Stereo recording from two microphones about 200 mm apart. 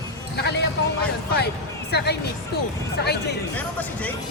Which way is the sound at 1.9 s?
55° left (ahead or behind).